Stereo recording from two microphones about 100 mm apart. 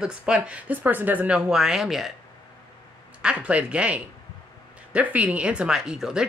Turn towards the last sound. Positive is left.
turn(degrees=-5)  # may be behind; listen again after turning